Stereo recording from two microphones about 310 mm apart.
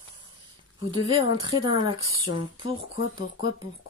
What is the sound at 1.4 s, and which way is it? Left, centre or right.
Speech, centre.